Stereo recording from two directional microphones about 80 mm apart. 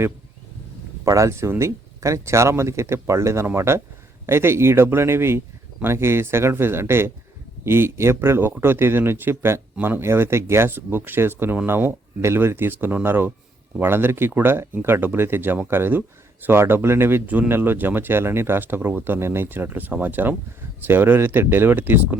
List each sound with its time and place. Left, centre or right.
1.0 s speech: right